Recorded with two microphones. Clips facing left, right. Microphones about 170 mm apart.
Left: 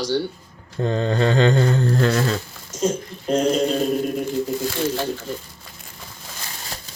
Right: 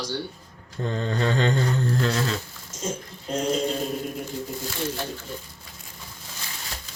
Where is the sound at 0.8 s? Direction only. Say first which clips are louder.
Left 6 dB; 90° left; by 2.2 s 65° left (ahead or behind).